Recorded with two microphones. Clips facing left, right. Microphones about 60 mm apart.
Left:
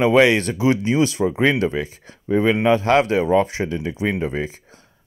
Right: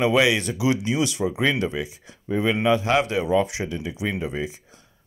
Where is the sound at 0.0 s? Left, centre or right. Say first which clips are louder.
Left 5 dB; left.